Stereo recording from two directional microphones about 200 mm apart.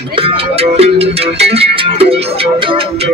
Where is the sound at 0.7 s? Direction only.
30° right (ahead or behind).